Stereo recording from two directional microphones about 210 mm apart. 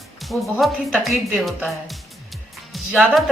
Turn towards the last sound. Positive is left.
turn(degrees=-5)  # may be behind; listen again after turning